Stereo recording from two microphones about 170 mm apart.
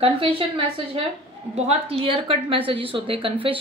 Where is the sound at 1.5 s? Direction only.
40° right (ahead or behind).